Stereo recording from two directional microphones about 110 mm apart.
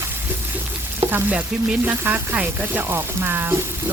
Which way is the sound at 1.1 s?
15° right (ahead or behind).